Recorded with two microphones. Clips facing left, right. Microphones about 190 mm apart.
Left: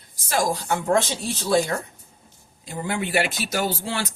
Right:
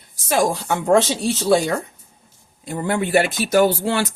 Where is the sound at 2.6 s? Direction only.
55° right (ahead or behind).